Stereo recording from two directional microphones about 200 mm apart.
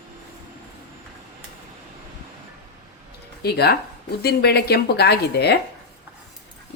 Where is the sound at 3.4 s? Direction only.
55° left (ahead or behind).